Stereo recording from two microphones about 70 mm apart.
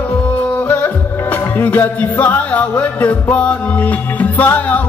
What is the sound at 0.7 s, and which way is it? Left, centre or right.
Music, left.